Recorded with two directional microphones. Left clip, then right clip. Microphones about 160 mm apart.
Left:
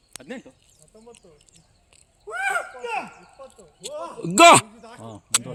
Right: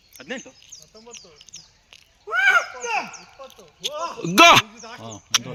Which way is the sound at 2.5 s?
5° right (ahead or behind).